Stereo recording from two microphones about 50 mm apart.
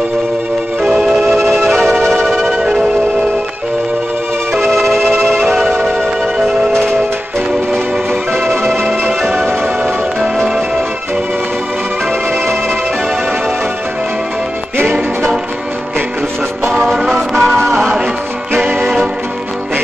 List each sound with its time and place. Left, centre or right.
0.8 s music: centre
2.2 s music: centre
2.5 s music: centre
4.6 s music: centre
8.6 s music: centre
14.8 s music: right
16.8 s music: centre
18.5 s music: right